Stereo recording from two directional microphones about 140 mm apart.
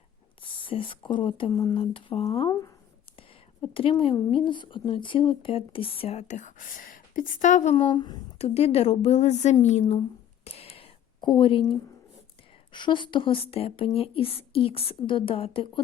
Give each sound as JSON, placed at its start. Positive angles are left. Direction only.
{"t": 0.4, "sound": "a woman's voice", "side_deg": 40}
{"t": 2.5, "sound": "speech", "side_deg": 25}
{"t": 3.2, "sound": "a woman's voice", "side_deg": 40}
{"t": 7.8, "sound": "a woman's voice", "side_deg": 35}
{"t": 8.4, "sound": "a woman's voice", "side_deg": 50}
{"t": 10.4, "sound": "a sound", "side_deg": 45}
{"t": 12.7, "sound": "a woman's voice", "side_deg": 35}